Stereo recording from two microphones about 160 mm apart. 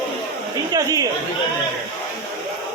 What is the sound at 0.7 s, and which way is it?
Speech, 25° right (ahead or behind).